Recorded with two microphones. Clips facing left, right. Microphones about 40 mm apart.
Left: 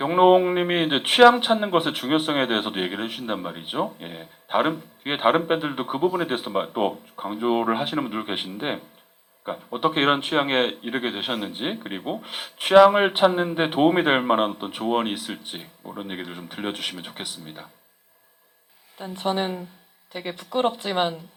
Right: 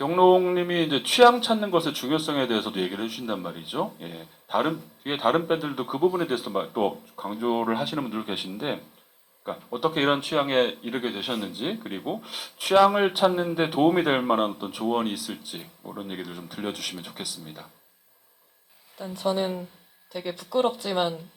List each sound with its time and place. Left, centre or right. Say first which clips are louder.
0.0 s speech: left 2 dB; left
18.9 s speech: left 1 dB; left